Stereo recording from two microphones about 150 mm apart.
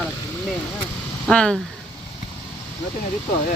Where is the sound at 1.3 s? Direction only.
5° left (ahead or behind).